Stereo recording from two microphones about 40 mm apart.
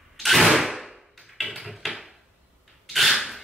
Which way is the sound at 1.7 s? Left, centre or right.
Centre.